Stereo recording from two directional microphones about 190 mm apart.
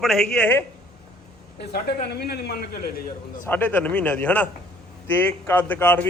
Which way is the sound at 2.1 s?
55° left (ahead or behind).